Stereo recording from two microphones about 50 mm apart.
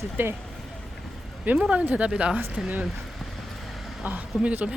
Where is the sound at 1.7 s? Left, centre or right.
Right.